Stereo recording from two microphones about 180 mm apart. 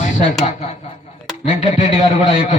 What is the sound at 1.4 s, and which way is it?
Speech, 40° left (ahead or behind).